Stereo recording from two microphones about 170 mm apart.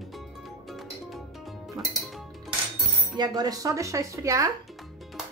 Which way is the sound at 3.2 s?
25° right (ahead or behind).